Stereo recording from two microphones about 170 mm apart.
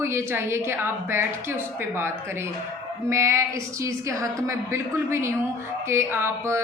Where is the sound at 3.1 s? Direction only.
15° right (ahead or behind).